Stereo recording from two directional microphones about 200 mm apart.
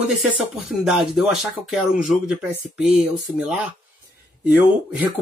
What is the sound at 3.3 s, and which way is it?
Speech, 5° right (ahead or behind).